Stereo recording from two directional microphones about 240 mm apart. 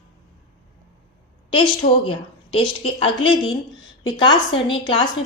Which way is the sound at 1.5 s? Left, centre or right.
Left.